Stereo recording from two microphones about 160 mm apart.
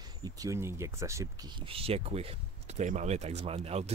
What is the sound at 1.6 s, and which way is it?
Speech, 35° right (ahead or behind).